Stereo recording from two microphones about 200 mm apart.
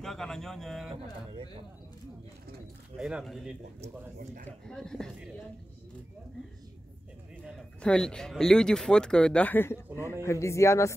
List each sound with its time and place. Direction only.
0.0 s a man's voice: centre (ahead or behind)
1.3 s speech: 30° right (ahead or behind)
3.0 s speech: 5° right (ahead or behind)
7.4 s a man's voice: centre (ahead or behind)